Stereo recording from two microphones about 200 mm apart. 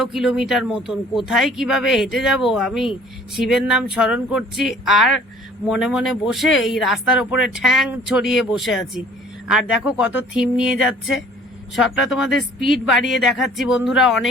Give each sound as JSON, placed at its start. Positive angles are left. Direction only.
{"t": 0.0, "sound": "speech", "side_deg": 0}